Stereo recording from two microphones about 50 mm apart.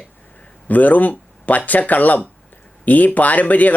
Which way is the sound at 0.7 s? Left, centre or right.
Left.